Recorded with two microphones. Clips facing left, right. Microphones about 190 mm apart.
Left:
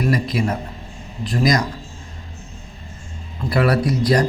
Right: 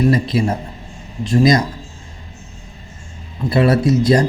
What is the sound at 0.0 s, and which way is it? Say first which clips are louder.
Speech: right 4 dB; 25° right (ahead or behind).